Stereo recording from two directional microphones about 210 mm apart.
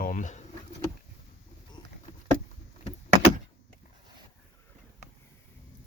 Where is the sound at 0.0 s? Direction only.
40° left (ahead or behind).